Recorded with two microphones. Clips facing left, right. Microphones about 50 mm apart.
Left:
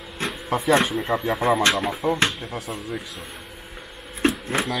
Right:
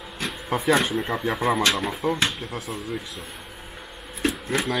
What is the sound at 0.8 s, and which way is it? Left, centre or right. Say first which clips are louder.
Speech: left 2 dB; centre.